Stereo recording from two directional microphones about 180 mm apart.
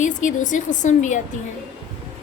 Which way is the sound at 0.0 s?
45° left (ahead or behind).